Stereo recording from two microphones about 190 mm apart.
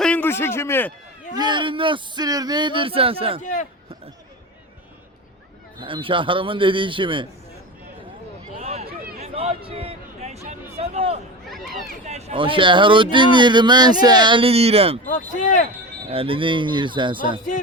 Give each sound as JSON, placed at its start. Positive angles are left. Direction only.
{"t": 0.0, "sound": "a man's voice", "side_deg": 10}
{"t": 1.4, "sound": "speech", "side_deg": -25}
{"t": 3.4, "sound": "speech", "side_deg": 40}
{"t": 5.8, "sound": "speech", "side_deg": -25}
{"t": 8.5, "sound": "a sound", "side_deg": -35}
{"t": 11.5, "sound": "a sound", "side_deg": 0}
{"t": 12.0, "sound": "speech", "side_deg": -35}
{"t": 15.0, "sound": "speech", "side_deg": 45}
{"t": 16.0, "sound": "speech", "side_deg": -30}